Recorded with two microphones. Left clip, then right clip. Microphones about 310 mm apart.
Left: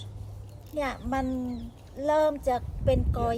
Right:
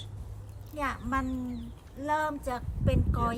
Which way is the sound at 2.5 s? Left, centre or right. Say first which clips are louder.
Left 7 dB; centre.